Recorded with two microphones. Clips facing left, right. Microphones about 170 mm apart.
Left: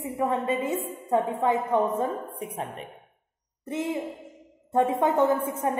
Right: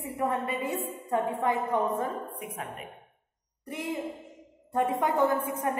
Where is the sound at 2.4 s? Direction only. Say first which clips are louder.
Left 4 dB; 30° left (ahead or behind).